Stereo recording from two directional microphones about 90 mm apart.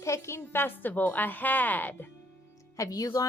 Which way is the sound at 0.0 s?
30° left (ahead or behind).